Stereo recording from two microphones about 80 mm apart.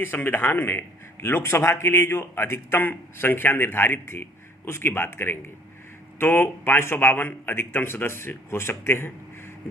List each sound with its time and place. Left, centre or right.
0.0 s a man's voice: left